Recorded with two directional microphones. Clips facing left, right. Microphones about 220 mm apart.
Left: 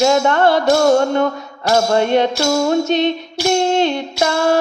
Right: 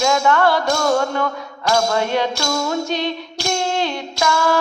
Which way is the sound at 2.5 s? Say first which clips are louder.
Left 6 dB; 35° left (ahead or behind).